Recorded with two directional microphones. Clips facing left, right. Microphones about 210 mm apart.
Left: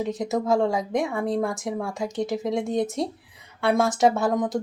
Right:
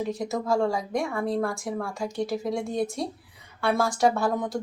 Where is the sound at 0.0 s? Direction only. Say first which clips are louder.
Left 3 dB; 20° left (ahead or behind).